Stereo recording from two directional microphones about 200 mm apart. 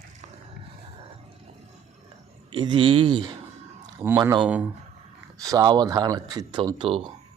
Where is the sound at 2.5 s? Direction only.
25° right (ahead or behind); by 4.6 s 5° right (ahead or behind).